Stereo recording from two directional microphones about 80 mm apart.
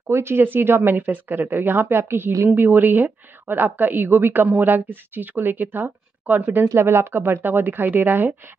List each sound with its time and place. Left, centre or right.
0.0 s speech: right